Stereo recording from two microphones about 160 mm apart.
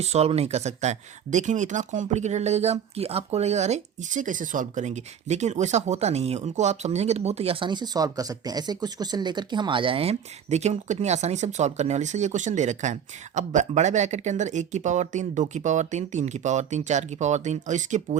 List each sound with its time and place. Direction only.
0.0 s speech: 40° right (ahead or behind)